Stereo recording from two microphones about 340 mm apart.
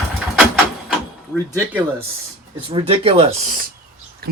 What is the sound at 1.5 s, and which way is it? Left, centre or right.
Speech, centre.